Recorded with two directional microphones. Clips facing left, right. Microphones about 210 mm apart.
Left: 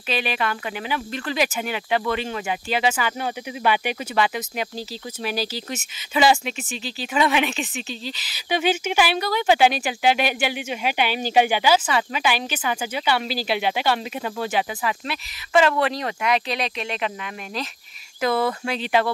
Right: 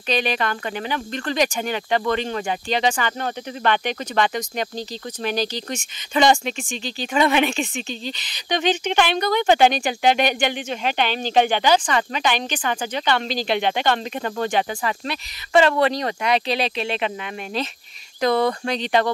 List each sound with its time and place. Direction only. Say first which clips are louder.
0.1 s speech: right 2 dB; 5° left (ahead or behind)
16.5 s speech: right 4 dB; 30° right (ahead or behind)
18.2 s speech: right 3 dB; 5° left (ahead or behind)